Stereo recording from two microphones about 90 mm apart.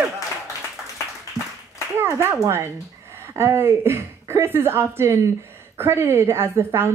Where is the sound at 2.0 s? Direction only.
30° right (ahead or behind).